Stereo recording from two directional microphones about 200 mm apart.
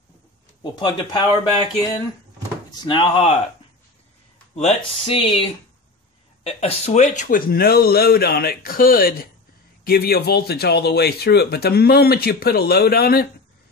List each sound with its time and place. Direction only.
0.7 s speech: 20° left (ahead or behind)
4.6 s speech: 30° left (ahead or behind); by 13.3 s 50° left (ahead or behind)